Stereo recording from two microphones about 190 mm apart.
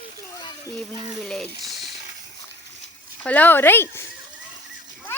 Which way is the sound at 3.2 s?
10° left (ahead or behind).